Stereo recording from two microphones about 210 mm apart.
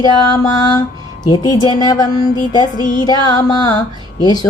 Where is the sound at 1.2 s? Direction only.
20° left (ahead or behind).